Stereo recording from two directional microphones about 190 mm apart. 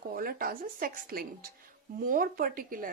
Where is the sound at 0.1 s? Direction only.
50° right (ahead or behind).